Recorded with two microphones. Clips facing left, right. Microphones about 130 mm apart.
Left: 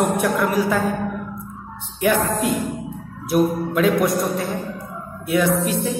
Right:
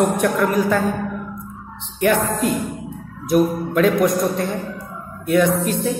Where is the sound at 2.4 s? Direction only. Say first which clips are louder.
Right 1 dB; 40° right (ahead or behind).